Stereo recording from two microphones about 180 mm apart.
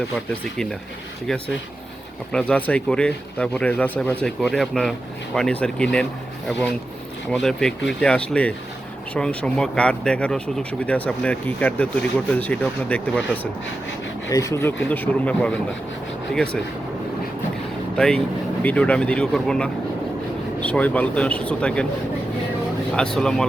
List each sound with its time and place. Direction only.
1.3 s speech: 5° left (ahead or behind)
7.3 s speech: 5° left (ahead or behind)
17.9 s speech: 5° left (ahead or behind)
23.0 s speech: 5° left (ahead or behind)